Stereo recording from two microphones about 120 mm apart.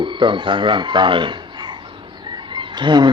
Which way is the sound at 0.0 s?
40° right (ahead or behind).